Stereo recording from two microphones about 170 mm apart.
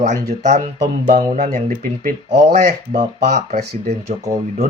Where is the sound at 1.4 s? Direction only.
50° right (ahead or behind); by 3.9 s 70° right (ahead or behind).